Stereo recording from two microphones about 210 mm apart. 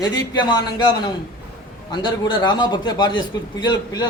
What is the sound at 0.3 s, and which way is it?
A man's voice, 20° left (ahead or behind).